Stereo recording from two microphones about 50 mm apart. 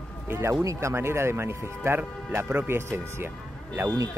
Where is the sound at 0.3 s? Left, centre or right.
Right.